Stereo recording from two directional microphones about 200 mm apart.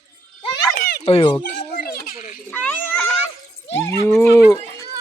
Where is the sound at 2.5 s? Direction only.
10° left (ahead or behind).